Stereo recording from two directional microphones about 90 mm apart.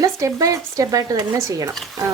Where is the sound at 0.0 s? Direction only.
40° right (ahead or behind).